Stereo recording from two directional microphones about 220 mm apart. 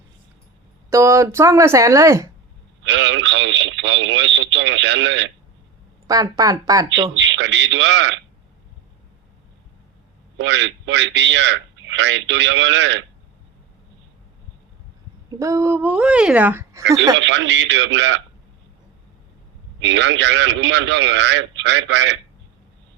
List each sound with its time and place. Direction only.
0.9 s speech: 15° right (ahead or behind)
2.8 s speech: 55° right (ahead or behind)
6.1 s speech: 15° right (ahead or behind)
7.2 s a man's voice: 55° right (ahead or behind)
10.3 s a man's voice: 55° right (ahead or behind)
15.4 s speech: 15° right (ahead or behind)
17.2 s a man's voice: 55° right (ahead or behind)
19.8 s a man's voice: 55° right (ahead or behind)